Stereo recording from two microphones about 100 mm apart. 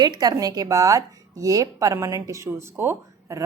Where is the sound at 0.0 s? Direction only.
40° right (ahead or behind).